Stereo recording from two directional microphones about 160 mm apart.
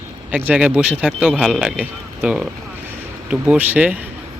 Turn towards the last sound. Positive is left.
turn(degrees=-10)  # may be behind; listen again after turning